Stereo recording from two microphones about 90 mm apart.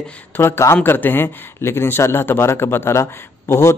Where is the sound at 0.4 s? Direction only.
30° left (ahead or behind).